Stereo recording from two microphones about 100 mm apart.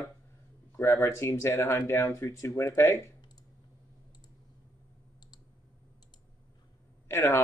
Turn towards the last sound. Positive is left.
turn(degrees=25)  # may be behind; listen again after turning